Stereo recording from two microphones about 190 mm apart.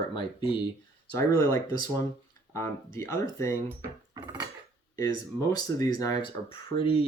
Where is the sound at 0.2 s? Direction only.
25° left (ahead or behind).